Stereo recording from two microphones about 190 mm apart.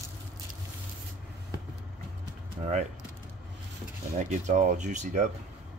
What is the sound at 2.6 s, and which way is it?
Speech, 35° right (ahead or behind).